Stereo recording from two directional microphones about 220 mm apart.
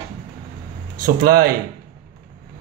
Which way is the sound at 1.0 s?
45° right (ahead or behind).